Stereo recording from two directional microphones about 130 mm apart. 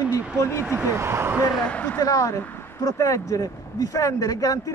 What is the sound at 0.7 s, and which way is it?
Speech, 20° right (ahead or behind).